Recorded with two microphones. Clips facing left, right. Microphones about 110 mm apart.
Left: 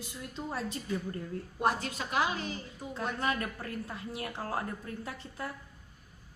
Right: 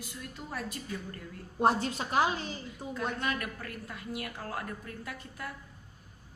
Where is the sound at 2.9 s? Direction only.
25° left (ahead or behind).